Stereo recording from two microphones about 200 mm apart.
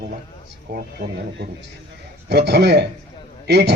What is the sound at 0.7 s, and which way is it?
A man's voice, 55° right (ahead or behind).